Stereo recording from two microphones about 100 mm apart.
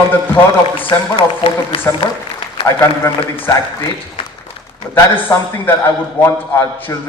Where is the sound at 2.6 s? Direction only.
70° left (ahead or behind).